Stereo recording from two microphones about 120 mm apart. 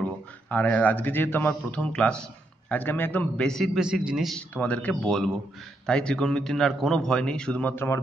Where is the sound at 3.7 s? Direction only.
5° right (ahead or behind).